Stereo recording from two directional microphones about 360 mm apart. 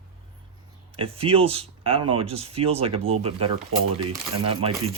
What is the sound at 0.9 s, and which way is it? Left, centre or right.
Speech, centre.